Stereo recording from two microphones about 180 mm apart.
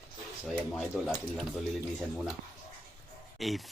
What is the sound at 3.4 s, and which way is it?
Speech, centre (ahead or behind).